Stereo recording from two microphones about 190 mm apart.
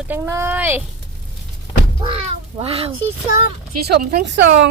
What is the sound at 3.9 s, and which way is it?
Speech, 55° right (ahead or behind).